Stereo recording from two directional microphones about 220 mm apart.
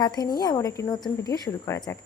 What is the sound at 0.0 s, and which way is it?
A woman's voice, 20° left (ahead or behind).